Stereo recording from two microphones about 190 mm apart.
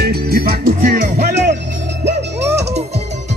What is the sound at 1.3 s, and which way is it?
Music, 65° right (ahead or behind).